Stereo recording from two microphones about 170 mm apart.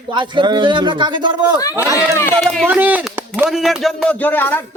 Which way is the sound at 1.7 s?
15° right (ahead or behind).